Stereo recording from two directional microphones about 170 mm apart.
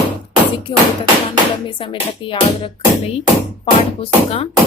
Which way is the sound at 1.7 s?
30° left (ahead or behind).